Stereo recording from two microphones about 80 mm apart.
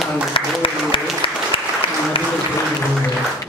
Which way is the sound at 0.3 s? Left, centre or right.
Left.